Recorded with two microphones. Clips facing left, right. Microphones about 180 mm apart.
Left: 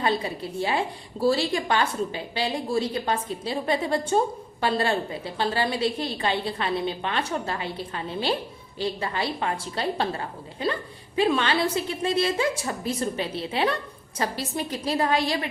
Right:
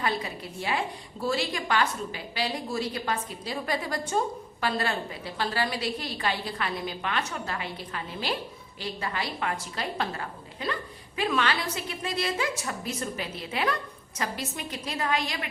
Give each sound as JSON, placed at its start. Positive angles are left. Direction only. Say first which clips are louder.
{"t": 0.0, "sound": "a woman's voice", "louder": "left 5 dB", "side_deg": 30}